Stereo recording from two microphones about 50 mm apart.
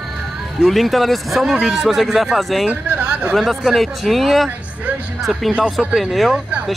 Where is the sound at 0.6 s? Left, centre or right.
Centre.